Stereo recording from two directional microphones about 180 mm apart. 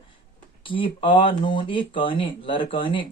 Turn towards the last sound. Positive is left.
turn(degrees=30)  # may be behind; listen again after turning